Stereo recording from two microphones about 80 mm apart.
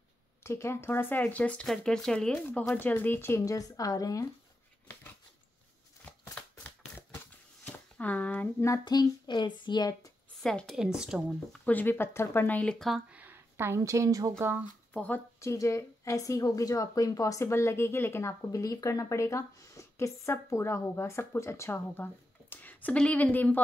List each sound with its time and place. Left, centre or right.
0.4 s a woman's voice: left
7.6 s a sound: centre
8.5 s a woman's voice: left
8.8 s speech: left
10.4 s a woman's voice: centre
10.8 s speech: centre
11.6 s speech: left
12.7 s a woman's voice: centre
13.1 s a sound: right
13.8 s a woman's voice: right
14.4 s speech: right
15.0 s speech: left
15.4 s a woman's voice: left
18.5 s a woman's voice: left